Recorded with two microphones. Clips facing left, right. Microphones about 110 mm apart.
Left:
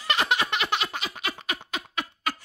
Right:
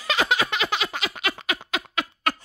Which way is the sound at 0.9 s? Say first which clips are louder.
Right 4 dB; 90° right.